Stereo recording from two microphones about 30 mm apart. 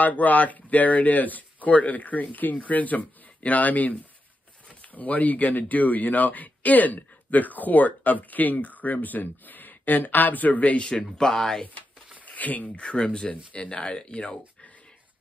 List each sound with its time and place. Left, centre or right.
0.0 s speech: left
4.9 s speech: left
10.8 s speech: left
12.3 s a sound: left
12.6 s speech: left